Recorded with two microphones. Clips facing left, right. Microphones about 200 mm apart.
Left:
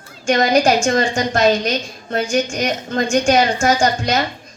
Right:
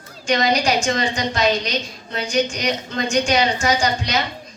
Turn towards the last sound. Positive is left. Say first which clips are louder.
# left 4 dB
turn(degrees=50)  # may be behind; listen again after turning